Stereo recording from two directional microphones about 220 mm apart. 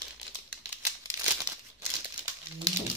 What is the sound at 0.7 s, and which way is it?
Crumpling, 15° right (ahead or behind).